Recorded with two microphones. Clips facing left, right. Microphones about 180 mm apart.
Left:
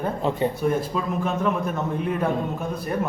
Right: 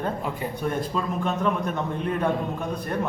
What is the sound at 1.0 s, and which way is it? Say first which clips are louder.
Speech: left 1 dB; 5° left (ahead or behind).